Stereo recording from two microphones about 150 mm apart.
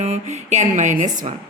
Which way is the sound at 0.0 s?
50° right (ahead or behind).